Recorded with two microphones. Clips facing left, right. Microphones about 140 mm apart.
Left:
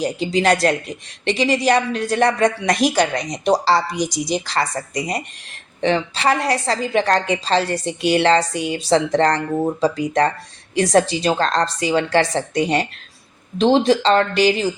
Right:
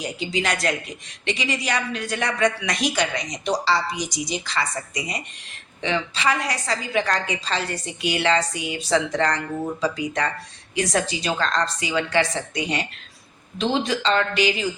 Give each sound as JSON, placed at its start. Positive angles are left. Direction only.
{"t": 0.0, "sound": "a woman's voice", "side_deg": 35}